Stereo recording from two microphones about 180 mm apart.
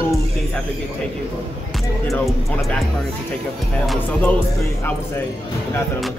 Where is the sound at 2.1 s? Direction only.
Centre (ahead or behind).